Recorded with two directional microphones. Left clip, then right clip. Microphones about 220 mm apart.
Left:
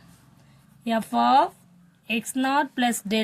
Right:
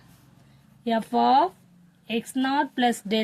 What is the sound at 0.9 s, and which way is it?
A woman's voice, 30° left (ahead or behind).